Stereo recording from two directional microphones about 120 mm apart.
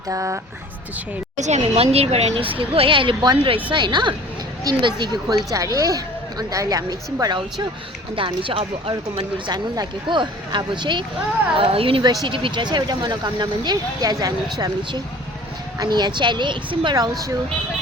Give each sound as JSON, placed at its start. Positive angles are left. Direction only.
{"t": 0.1, "sound": "a woman's voice", "side_deg": -25}
{"t": 1.4, "sound": "a woman's voice", "side_deg": -70}
{"t": 8.1, "sound": "speech", "side_deg": -45}
{"t": 9.5, "sound": "speech", "side_deg": -40}